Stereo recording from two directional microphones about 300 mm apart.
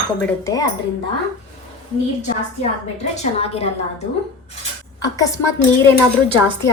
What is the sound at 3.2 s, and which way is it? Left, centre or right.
A woman's voice, centre.